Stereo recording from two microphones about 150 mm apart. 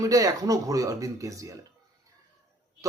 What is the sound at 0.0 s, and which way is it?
Speech, 25° right (ahead or behind).